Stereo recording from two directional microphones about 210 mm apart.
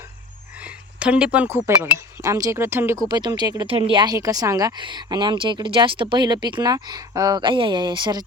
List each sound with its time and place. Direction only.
0.9 s speech: 5° right (ahead or behind); by 8.2 s 20° right (ahead or behind)